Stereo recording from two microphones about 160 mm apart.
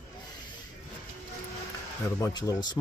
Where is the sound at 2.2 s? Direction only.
20° left (ahead or behind).